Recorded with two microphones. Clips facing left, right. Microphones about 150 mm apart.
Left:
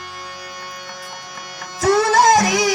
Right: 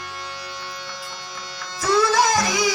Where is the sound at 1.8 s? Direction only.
50° left (ahead or behind).